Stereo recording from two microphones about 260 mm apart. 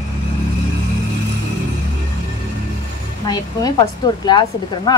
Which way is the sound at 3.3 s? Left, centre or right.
Centre.